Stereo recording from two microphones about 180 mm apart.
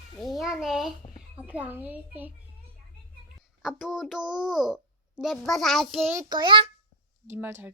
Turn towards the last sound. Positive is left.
turn(degrees=-10)  # may be behind; listen again after turning